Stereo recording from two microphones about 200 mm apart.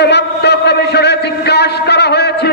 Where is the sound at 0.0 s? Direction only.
55° left (ahead or behind).